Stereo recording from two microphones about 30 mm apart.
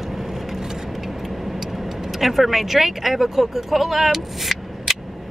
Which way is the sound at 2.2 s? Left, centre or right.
Centre.